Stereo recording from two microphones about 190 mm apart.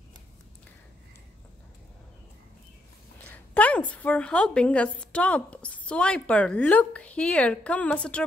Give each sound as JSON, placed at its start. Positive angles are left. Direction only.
{"t": 3.3, "sound": "a woman's voice", "side_deg": 5}